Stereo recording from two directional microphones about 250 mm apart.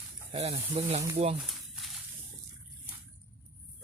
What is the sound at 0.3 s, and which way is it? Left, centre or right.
Speech, right.